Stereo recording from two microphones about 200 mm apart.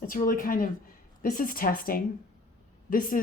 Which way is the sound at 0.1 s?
45° left (ahead or behind).